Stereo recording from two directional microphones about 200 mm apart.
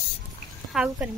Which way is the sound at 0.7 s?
5° right (ahead or behind).